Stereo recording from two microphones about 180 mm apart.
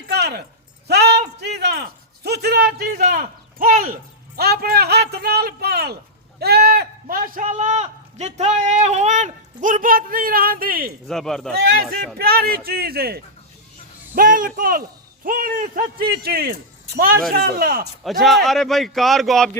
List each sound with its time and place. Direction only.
0.1 s a sound: 65° right (ahead or behind)
1.4 s a man's voice: 65° right (ahead or behind)
3.0 s speech: 50° right (ahead or behind)
4.4 s a man's voice: 60° right (ahead or behind)
11.1 s a man's voice: 5° left (ahead or behind)
11.6 s a man's voice: 60° right (ahead or behind)
18.0 s a man's voice: centre (ahead or behind)